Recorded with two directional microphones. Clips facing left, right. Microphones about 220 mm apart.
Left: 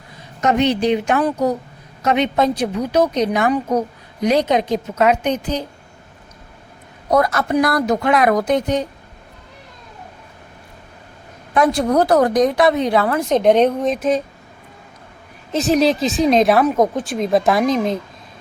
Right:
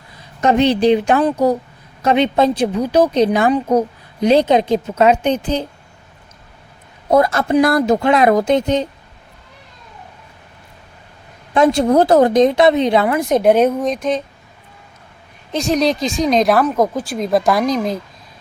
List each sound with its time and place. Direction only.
0.4 s a woman's voice: 30° right (ahead or behind)
7.1 s a woman's voice: 25° right (ahead or behind)
11.5 s a woman's voice: 25° right (ahead or behind); by 14.2 s 5° left (ahead or behind)
15.5 s a woman's voice: 5° left (ahead or behind)